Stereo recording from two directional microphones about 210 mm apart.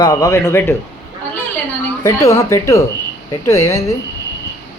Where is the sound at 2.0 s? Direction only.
15° left (ahead or behind).